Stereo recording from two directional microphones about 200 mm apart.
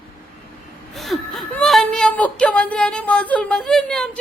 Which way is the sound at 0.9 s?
Centre (ahead or behind).